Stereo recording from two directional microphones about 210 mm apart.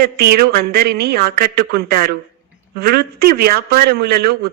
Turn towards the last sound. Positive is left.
turn(degrees=-45)  # may be behind; listen again after turning